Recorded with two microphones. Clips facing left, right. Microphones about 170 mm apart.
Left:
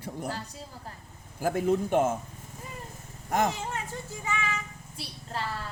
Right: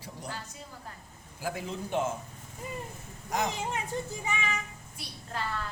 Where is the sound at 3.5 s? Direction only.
15° right (ahead or behind).